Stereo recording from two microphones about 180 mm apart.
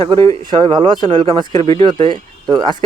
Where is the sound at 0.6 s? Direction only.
25° right (ahead or behind).